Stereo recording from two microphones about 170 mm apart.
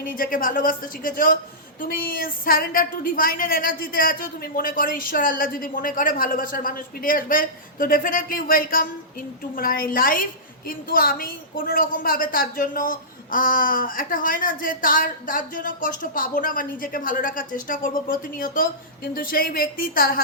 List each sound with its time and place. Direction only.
0.0 s a woman's voice: 55° left (ahead or behind)